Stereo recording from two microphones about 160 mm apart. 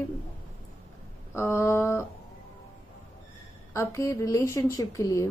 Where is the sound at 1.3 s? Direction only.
15° left (ahead or behind).